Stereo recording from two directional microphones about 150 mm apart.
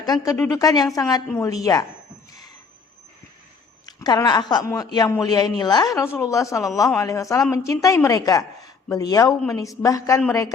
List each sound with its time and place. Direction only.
0.0 s speech: 25° left (ahead or behind)
3.8 s speech: 25° left (ahead or behind)